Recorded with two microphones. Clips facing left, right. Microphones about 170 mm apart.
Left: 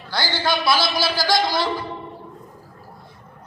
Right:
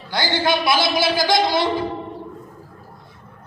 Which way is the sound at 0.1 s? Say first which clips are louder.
Right 3 dB; 20° right (ahead or behind).